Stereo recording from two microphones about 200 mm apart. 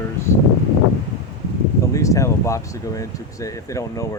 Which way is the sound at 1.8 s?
15° left (ahead or behind).